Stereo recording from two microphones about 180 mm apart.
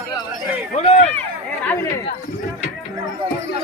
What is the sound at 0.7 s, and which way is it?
Speech, 35° left (ahead or behind).